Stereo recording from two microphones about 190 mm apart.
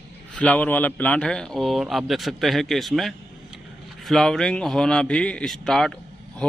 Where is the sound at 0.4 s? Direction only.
10° left (ahead or behind).